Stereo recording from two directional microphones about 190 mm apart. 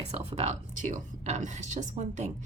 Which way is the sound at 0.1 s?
35° right (ahead or behind).